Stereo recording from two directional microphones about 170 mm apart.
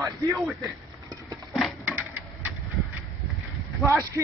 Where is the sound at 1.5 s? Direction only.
5° right (ahead or behind).